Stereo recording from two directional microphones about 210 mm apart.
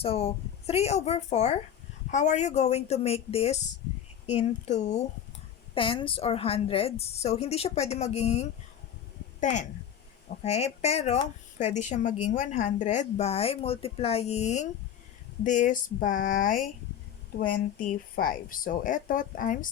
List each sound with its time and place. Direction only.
0.0 s a woman's voice: 30° left (ahead or behind)
17.8 s speech: 40° left (ahead or behind)